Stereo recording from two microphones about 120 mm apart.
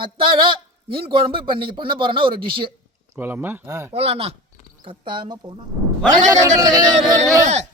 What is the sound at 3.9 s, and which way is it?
Speech, 55° right (ahead or behind).